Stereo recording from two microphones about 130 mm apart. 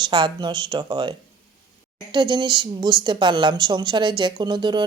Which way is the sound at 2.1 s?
35° right (ahead or behind).